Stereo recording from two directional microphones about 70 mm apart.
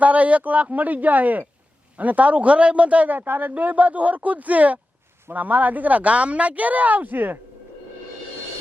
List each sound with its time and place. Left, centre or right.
0.0 s speech: right